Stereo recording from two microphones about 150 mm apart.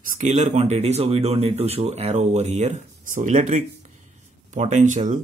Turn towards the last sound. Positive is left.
turn(degrees=-55)  # may be behind; listen again after turning